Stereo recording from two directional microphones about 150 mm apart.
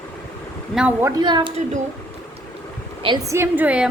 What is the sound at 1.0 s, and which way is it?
Speech, 25° right (ahead or behind).